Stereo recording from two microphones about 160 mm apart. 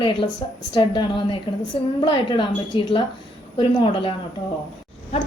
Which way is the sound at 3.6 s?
35° left (ahead or behind).